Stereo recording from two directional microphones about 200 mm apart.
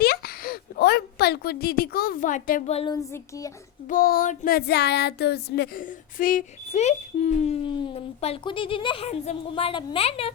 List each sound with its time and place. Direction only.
0.0 s a sound: 50° left (ahead or behind); by 2.9 s 30° left (ahead or behind)
2.9 s a child's voice: 15° left (ahead or behind)
3.8 s child singing: 45° left (ahead or behind)
6.7 s speech: 35° left (ahead or behind)